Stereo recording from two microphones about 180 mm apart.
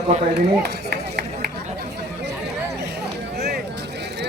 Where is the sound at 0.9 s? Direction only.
65° right (ahead or behind).